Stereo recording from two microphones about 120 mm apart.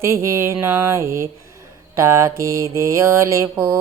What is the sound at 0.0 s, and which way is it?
Mantra, 25° right (ahead or behind).